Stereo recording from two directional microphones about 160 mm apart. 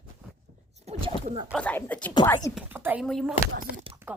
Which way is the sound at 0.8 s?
40° right (ahead or behind).